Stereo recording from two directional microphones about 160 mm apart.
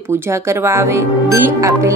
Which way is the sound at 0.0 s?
15° right (ahead or behind).